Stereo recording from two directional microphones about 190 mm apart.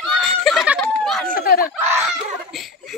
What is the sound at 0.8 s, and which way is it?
Chatter, 5° left (ahead or behind).